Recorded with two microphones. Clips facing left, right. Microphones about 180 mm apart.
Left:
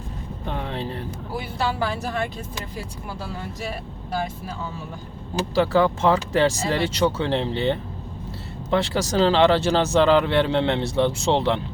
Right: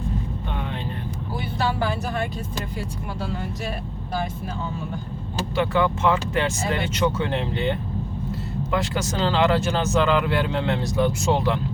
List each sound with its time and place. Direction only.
0.4 s vehicle: 35° left (ahead or behind)
5.5 s speech: 35° left (ahead or behind)